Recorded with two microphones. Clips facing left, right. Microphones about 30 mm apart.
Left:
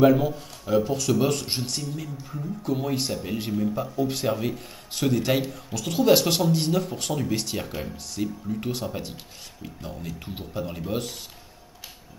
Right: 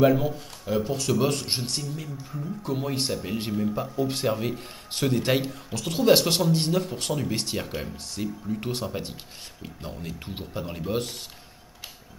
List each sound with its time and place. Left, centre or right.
0.0 s speech: centre
9.8 s speech: right